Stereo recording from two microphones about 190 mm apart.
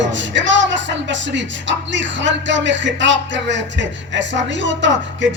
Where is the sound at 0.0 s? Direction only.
70° right (ahead or behind).